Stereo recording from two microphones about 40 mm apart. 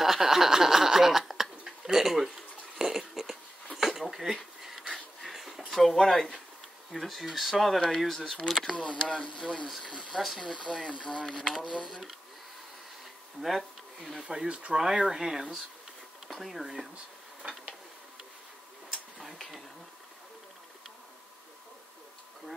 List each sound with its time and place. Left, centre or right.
0.0 s speech: centre
2.8 s a sound: centre
4.6 s dog: centre
4.9 s wheeze: centre
5.7 s speech: centre
8.7 s speech: left
11.2 s speech: centre
13.4 s speech: centre
14.7 s speech: centre
17.4 s a sound: right
18.9 s a sound: centre